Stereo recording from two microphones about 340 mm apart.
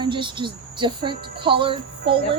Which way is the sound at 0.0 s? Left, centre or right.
Centre.